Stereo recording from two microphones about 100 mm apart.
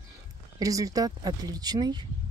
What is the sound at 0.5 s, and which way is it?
Speech, 35° right (ahead or behind).